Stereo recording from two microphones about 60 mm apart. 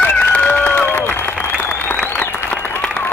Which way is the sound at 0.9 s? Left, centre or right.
Left.